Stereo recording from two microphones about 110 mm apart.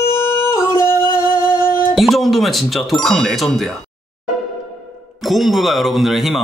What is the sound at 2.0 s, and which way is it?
Speech, centre (ahead or behind).